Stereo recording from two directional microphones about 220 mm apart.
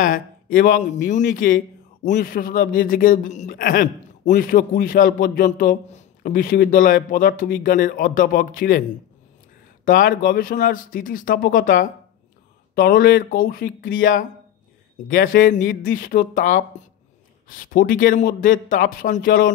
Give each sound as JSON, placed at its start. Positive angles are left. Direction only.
{"t": 0.0, "sound": "a man's voice", "side_deg": 40}
{"t": 9.8, "sound": "a man's voice", "side_deg": 40}